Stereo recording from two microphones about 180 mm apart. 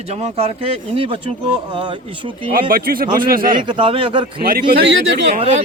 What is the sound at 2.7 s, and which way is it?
Speech, 55° right (ahead or behind).